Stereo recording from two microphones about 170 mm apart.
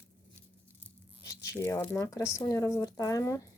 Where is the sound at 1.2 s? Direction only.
20° left (ahead or behind).